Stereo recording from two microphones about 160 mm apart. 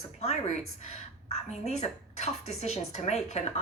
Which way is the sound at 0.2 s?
40° left (ahead or behind).